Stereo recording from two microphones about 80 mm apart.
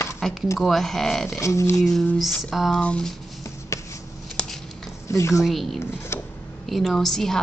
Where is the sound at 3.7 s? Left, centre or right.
Left.